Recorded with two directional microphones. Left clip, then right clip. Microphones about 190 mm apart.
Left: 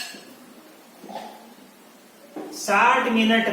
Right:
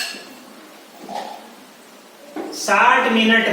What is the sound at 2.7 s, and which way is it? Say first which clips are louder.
Speech: right 4 dB; 15° right (ahead or behind).